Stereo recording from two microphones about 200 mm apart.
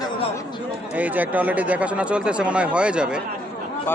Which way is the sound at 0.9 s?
10° right (ahead or behind).